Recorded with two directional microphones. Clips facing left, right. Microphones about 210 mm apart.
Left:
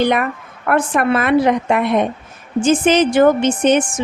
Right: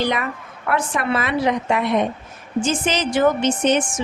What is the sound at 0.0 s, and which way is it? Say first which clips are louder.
A woman's voice: left 6 dB; 55° left (ahead or behind).